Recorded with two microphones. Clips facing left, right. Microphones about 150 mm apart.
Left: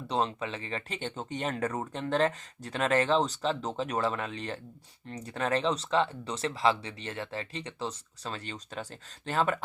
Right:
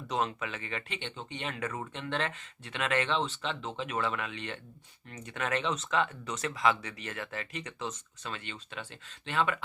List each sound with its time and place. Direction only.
0.1 s speech: 30° left (ahead or behind)